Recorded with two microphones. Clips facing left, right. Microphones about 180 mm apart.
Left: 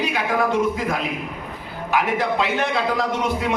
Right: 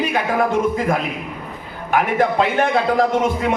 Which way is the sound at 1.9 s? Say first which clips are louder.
Right 4 dB; 50° right (ahead or behind).